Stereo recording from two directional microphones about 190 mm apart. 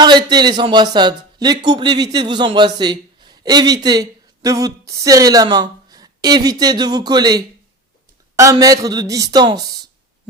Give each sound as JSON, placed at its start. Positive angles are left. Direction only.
{"t": 0.0, "sound": "speech", "side_deg": -20}